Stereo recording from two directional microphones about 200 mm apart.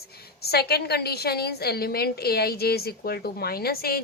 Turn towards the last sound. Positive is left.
turn(degrees=50)  # may be behind; listen again after turning